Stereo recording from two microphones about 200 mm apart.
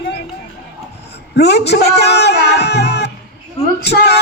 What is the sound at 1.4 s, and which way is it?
A man's voice, 55° left (ahead or behind).